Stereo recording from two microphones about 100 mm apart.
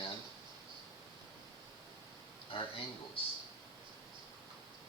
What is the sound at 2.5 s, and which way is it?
Speech, 65° left (ahead or behind).